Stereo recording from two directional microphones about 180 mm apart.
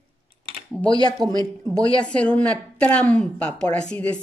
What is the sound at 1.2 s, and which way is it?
Speech, 20° right (ahead or behind).